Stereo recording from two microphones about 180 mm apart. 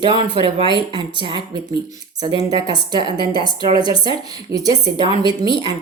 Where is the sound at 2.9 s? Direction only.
25° left (ahead or behind).